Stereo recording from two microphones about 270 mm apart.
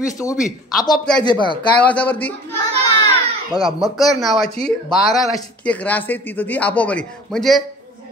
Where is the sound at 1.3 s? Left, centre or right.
Centre.